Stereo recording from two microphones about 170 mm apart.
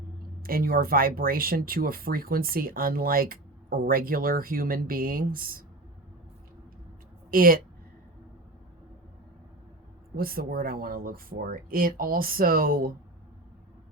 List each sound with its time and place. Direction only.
0.4 s speech: 60° right (ahead or behind)
7.3 s speech: 55° right (ahead or behind)
10.2 s speech: 60° right (ahead or behind)